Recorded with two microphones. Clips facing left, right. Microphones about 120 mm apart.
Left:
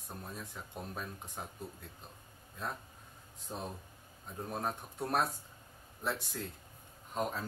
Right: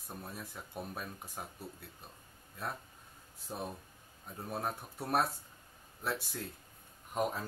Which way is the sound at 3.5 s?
Centre (ahead or behind).